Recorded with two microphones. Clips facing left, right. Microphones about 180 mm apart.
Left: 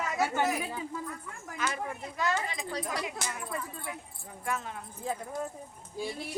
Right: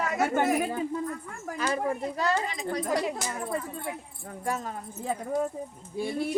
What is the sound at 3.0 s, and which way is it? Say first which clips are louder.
Speech: right 6 dB; 40° right (ahead or behind).